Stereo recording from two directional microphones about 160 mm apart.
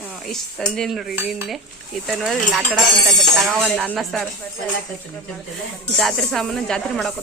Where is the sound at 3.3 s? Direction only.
5° left (ahead or behind).